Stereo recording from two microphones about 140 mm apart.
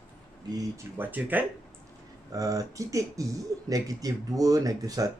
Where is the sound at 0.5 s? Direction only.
15° right (ahead or behind).